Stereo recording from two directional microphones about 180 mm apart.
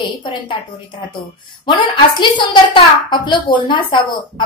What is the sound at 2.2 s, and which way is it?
A woman's voice, 25° left (ahead or behind).